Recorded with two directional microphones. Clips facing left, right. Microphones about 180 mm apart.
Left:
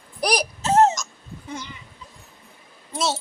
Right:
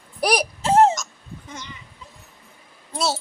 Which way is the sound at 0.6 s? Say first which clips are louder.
Right 1 dB; 30° right (ahead or behind).